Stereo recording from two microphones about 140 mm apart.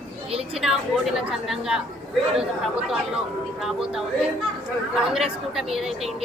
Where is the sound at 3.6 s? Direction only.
Centre (ahead or behind).